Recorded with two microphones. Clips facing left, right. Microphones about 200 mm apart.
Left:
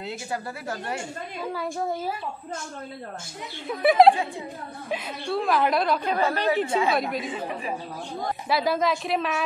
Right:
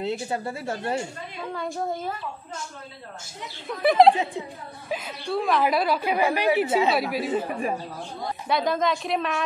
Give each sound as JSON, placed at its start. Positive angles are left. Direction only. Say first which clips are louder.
{"t": 0.0, "sound": "speech", "louder": "right 4 dB", "side_deg": -25}
{"t": 1.4, "sound": "a woman's voice", "louder": "even", "side_deg": 5}
{"t": 3.6, "sound": "a woman's voice", "louder": "even", "side_deg": 0}
{"t": 8.5, "sound": "a woman's voice", "louder": "even", "side_deg": 5}